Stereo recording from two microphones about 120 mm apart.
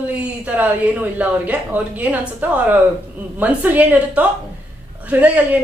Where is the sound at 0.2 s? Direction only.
10° right (ahead or behind).